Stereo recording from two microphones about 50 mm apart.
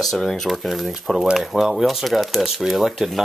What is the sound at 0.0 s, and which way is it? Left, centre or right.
Speech, centre.